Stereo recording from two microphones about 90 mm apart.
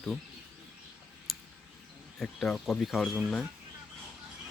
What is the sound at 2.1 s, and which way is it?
Speech, 10° left (ahead or behind).